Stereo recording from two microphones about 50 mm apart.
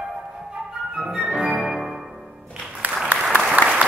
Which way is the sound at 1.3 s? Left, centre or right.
Right.